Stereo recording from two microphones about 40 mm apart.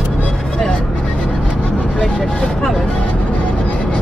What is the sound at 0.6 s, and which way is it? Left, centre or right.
Vehicle, left.